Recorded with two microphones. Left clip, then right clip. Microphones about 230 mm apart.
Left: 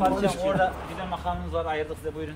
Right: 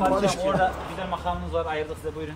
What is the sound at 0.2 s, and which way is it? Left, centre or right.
Speech, centre.